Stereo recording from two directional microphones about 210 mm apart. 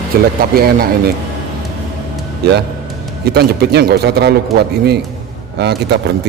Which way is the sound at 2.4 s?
50° right (ahead or behind).